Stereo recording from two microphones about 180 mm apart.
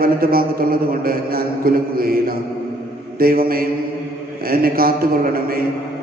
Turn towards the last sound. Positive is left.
turn(degrees=-55)  # may be behind; listen again after turning